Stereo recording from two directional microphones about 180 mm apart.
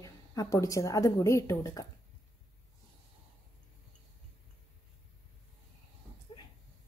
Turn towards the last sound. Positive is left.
turn(degrees=25)  # may be behind; listen again after turning